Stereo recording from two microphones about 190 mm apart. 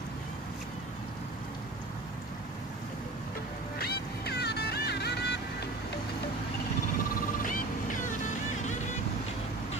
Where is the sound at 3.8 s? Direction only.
55° left (ahead or behind).